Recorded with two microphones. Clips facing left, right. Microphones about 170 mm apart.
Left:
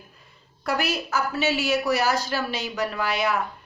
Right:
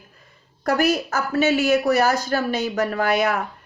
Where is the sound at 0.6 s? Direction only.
45° right (ahead or behind).